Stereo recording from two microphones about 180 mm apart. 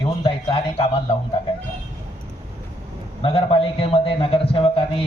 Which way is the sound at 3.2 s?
30° left (ahead or behind).